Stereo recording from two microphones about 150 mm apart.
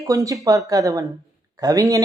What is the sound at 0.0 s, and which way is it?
Speech, 20° right (ahead or behind).